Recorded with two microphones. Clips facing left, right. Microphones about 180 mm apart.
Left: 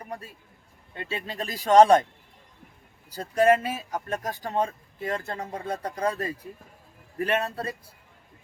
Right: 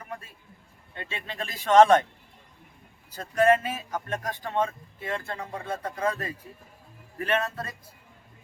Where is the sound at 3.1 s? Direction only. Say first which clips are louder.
Left 1 dB; 35° left (ahead or behind).